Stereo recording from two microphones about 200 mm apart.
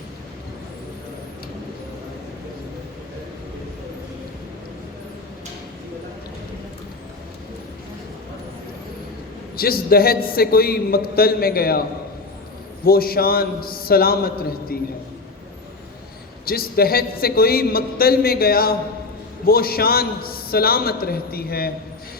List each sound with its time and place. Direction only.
9.6 s a man's voice: 50° left (ahead or behind)
12.8 s a man's voice: 50° left (ahead or behind)
16.5 s a man's voice: 50° left (ahead or behind)